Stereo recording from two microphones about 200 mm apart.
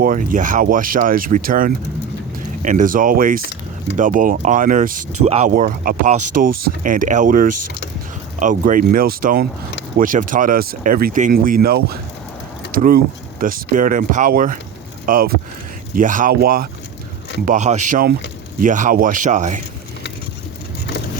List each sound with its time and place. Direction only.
0.0 s speech: 40° right (ahead or behind)
17.4 s speech: 35° right (ahead or behind)